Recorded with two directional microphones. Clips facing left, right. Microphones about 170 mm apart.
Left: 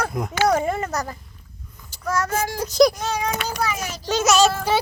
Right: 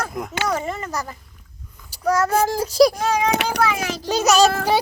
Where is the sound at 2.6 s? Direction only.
10° right (ahead or behind).